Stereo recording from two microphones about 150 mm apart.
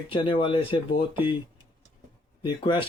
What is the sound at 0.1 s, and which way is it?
Speech, 35° left (ahead or behind).